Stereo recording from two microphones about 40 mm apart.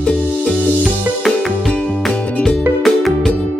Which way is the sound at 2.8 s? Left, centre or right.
Centre.